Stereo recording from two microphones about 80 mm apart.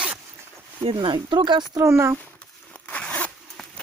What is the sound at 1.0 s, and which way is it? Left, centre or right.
Speech, right.